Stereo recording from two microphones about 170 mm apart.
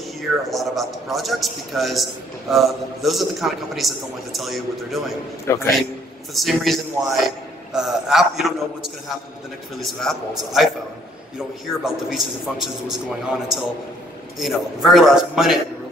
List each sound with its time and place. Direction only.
0.5 s a man's voice: centre (ahead or behind)
5.5 s a man's voice: 15° left (ahead or behind)
6.3 s a man's voice: centre (ahead or behind)
9.8 s a man's voice: centre (ahead or behind)